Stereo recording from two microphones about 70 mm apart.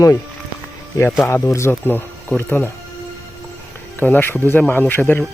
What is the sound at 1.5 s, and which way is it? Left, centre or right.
Speech, left.